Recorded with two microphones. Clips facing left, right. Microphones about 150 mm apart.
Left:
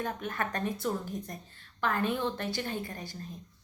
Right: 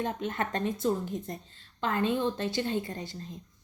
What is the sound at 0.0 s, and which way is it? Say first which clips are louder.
Speech: right 3 dB; 25° right (ahead or behind).